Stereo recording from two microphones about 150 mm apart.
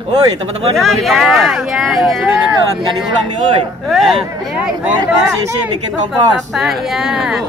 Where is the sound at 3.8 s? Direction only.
Centre (ahead or behind).